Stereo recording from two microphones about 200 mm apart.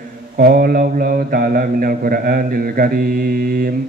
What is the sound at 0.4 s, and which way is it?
A man's voice, 45° right (ahead or behind).